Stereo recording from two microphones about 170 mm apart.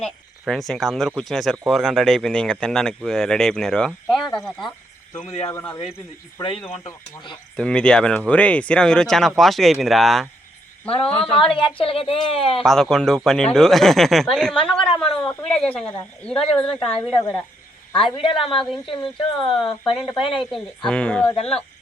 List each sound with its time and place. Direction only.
0.0 s cricket: centre (ahead or behind)
0.7 s speech: centre (ahead or behind)
5.3 s a woman's voice: 35° left (ahead or behind)
5.5 s speech: 15° left (ahead or behind)
7.5 s speech: 5° left (ahead or behind)
10.8 s a woman's voice: 35° left (ahead or behind)
12.6 s speech: centre (ahead or behind)
14.8 s speech: 30° left (ahead or behind)
15.3 s speech: 10° left (ahead or behind)
17.9 s a woman's voice: 30° left (ahead or behind)
20.5 s speech: 5° left (ahead or behind)
21.3 s a woman's voice: 35° left (ahead or behind)